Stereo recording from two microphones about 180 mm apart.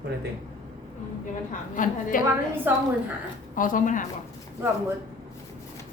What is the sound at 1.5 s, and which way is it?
Speech, 45° left (ahead or behind).